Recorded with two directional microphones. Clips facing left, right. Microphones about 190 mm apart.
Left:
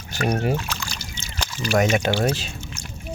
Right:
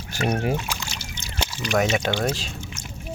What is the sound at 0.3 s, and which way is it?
Speech, 10° right (ahead or behind).